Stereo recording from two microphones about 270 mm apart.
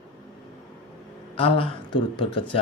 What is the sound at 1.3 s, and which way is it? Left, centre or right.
Speech, left.